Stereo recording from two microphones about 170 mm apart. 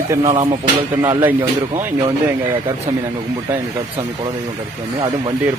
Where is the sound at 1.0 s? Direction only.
15° right (ahead or behind).